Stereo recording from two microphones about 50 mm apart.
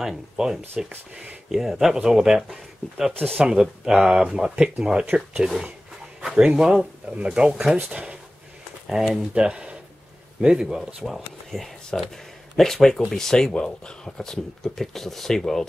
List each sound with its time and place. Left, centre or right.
0.0 s speech: centre
3.4 s speech: centre
9.1 s speech: right
10.8 s speech: centre